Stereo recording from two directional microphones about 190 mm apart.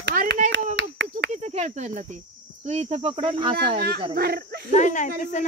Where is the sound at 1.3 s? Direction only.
35° right (ahead or behind).